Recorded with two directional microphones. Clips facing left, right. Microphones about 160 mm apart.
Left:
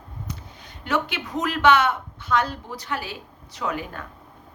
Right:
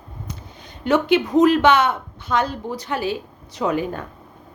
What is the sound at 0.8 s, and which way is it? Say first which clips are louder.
A woman's voice: right 9 dB; 20° right (ahead or behind).